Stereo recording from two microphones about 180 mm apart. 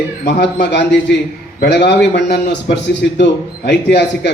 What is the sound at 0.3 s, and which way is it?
Speech, 70° left (ahead or behind).